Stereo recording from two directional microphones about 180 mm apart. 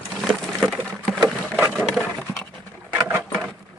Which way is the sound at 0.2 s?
Centre (ahead or behind).